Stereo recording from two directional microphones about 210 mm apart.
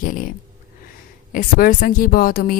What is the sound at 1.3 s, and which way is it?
Speech, 40° left (ahead or behind).